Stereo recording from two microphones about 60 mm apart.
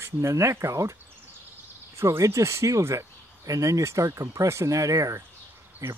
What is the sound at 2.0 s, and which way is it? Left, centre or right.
Speech, right.